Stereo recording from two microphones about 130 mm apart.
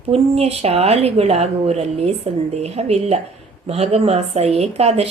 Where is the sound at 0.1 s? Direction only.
50° right (ahead or behind).